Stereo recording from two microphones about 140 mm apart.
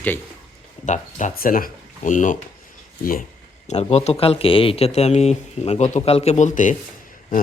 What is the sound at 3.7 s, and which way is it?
Speech, 50° left (ahead or behind).